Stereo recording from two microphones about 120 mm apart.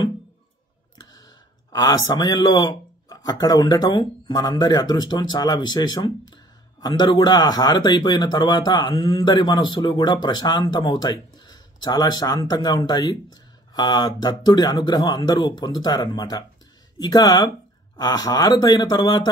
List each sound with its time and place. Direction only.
1.7 s speech: 30° left (ahead or behind)